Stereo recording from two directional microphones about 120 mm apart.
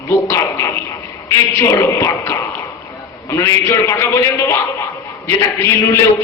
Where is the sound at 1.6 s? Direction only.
25° left (ahead or behind).